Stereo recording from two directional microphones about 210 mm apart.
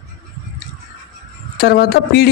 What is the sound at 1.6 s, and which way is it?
Speech, 50° left (ahead or behind).